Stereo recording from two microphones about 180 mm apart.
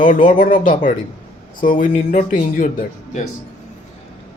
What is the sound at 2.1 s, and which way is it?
Speech, 45° left (ahead or behind).